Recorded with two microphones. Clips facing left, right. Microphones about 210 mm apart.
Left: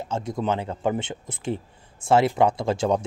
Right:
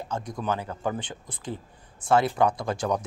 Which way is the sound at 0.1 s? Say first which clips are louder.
Left 4 dB; 25° left (ahead or behind).